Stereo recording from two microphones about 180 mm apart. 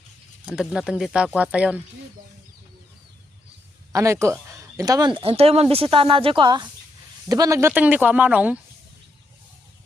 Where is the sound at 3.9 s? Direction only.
15° right (ahead or behind).